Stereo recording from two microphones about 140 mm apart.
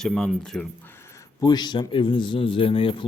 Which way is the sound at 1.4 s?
30° left (ahead or behind).